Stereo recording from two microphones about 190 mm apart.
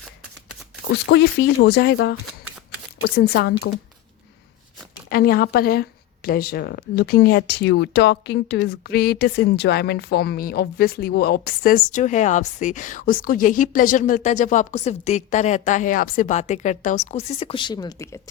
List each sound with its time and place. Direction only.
0.9 s speech: 65° left (ahead or behind)
5.0 s speech: 50° left (ahead or behind); by 18.2 s 15° left (ahead or behind)